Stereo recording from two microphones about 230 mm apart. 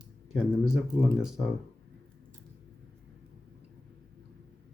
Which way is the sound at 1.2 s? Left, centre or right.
Centre.